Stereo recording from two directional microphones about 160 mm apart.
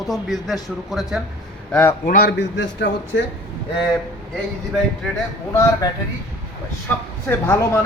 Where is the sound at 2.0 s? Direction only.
80° left.